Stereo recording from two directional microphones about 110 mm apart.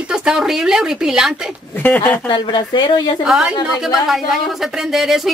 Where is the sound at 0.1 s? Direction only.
5° right (ahead or behind).